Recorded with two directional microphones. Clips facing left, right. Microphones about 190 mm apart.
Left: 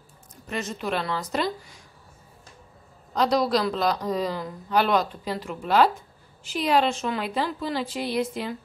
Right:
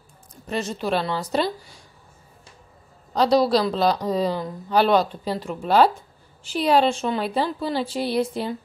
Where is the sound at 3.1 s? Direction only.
30° right (ahead or behind).